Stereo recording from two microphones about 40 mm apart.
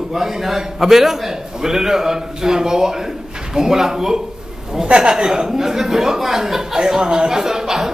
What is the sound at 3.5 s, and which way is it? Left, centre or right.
A woman's voice, centre.